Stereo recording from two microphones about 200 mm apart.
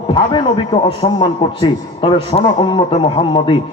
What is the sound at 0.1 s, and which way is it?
A man's voice, 25° left (ahead or behind).